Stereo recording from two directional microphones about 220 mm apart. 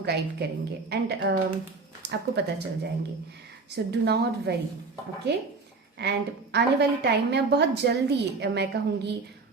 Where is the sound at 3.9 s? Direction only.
50° right (ahead or behind).